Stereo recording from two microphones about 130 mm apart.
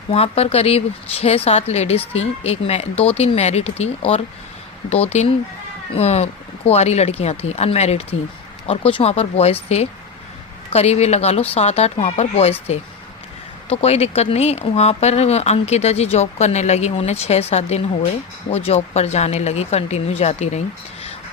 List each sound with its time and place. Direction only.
0.1 s speech: 50° left (ahead or behind)